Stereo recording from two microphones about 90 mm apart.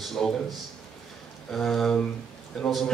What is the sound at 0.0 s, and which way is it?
A man's voice, 5° left (ahead or behind).